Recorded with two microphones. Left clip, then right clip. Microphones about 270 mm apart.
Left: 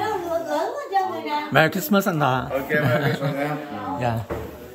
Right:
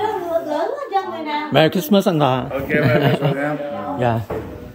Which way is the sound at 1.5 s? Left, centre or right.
Centre.